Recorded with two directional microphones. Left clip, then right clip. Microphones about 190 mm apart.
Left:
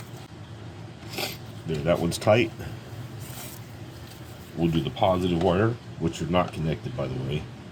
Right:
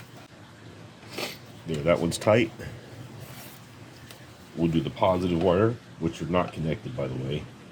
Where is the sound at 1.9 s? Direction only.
35° right (ahead or behind).